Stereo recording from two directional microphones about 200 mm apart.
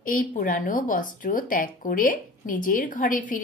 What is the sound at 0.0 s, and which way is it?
Speech, 40° left (ahead or behind).